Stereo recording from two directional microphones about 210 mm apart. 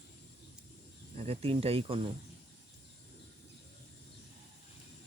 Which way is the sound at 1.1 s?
30° right (ahead or behind).